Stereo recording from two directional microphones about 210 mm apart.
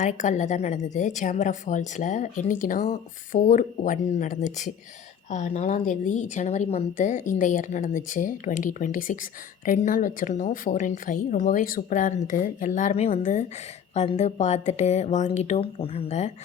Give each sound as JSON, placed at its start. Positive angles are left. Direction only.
{"t": 0.0, "sound": "a woman's voice", "side_deg": 35}